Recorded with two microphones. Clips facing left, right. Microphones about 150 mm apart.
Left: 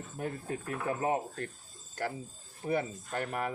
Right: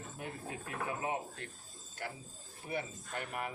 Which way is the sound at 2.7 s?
45° left (ahead or behind).